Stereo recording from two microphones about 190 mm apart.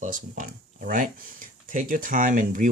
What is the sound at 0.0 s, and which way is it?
Speech, 45° right (ahead or behind).